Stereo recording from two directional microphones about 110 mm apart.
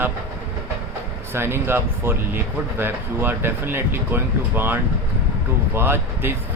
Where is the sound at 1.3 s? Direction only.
20° right (ahead or behind).